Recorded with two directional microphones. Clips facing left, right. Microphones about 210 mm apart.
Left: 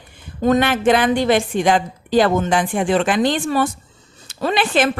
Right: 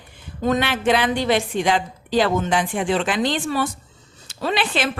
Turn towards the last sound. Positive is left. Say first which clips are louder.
# left 5 dB
turn(degrees=50)  # may be behind; listen again after turning